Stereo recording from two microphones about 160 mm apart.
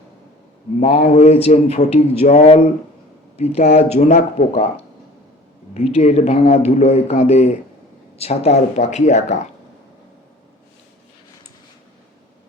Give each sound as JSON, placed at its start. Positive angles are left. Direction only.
{"t": 0.8, "sound": "a man's voice", "side_deg": 45}
{"t": 5.7, "sound": "speech", "side_deg": 40}